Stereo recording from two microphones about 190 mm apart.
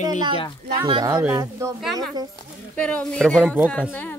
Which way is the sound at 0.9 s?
20° right (ahead or behind).